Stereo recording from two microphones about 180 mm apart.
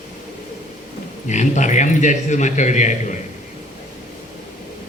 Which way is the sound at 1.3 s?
40° left (ahead or behind).